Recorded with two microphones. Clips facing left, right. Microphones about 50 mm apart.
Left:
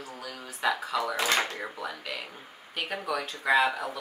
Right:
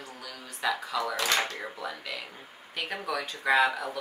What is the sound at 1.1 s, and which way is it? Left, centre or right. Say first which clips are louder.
Speech: left 1 dB; left.